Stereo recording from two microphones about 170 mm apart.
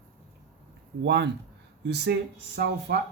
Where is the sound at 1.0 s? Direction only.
90° right.